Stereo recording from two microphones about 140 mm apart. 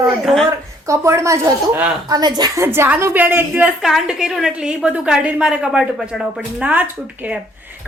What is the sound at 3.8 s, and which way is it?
A woman's voice, centre (ahead or behind).